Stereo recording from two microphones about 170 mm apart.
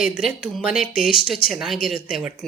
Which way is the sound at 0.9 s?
60° left (ahead or behind).